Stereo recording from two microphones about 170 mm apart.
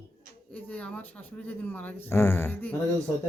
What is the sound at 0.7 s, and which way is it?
Speech, 10° left (ahead or behind).